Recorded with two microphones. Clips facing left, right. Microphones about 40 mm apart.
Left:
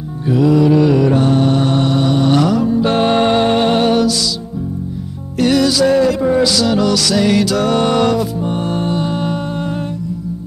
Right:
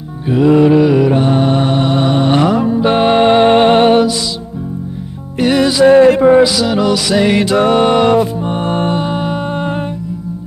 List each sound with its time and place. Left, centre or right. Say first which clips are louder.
0.3 s music: right 3 dB; right
0.7 s mantra: right 2 dB; centre
5.4 s music: right 2 dB; right
5.9 s a sound: right 7 dB; right
6.4 s music: right 2 dB; centre; by 9.0 s right
9.0 s music: right 2 dB; right